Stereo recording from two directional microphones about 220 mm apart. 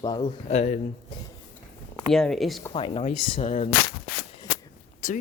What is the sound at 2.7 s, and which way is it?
Speech, 25° left (ahead or behind).